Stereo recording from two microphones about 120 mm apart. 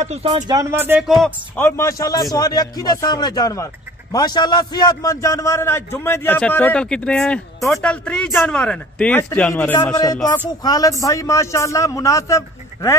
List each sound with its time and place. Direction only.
0.0 s speech: 65° right (ahead or behind)
0.7 s speech: 20° right (ahead or behind)
1.0 s speech: centre (ahead or behind)
1.6 s a man's voice: 20° left (ahead or behind)
10.6 s a man's voice: 30° left (ahead or behind)